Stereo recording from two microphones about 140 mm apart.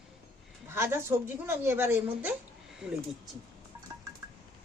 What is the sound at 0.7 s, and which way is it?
Dishes, 15° right (ahead or behind).